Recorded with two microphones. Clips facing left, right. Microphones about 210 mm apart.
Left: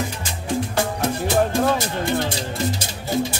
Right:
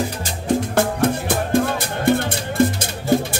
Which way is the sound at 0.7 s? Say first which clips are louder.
Right 4 dB; 55° right (ahead or behind).